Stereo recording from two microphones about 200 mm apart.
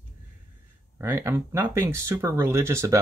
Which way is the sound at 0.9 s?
10° right (ahead or behind).